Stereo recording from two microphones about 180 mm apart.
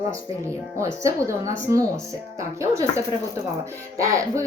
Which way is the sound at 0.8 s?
15° right (ahead or behind).